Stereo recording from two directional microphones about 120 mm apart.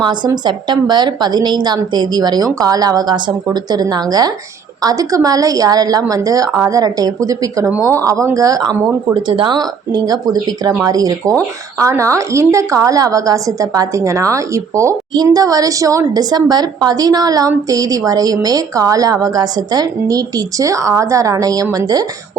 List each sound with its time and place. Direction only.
0.0 s a woman's voice: 40° right (ahead or behind)